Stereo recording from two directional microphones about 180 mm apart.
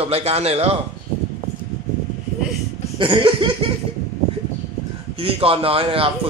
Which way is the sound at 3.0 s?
30° right (ahead or behind).